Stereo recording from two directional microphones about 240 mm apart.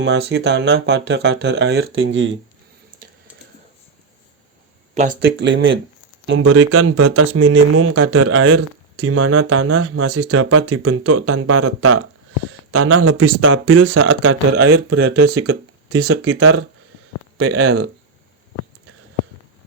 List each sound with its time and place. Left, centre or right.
0.0 s speech: right
4.9 s speech: right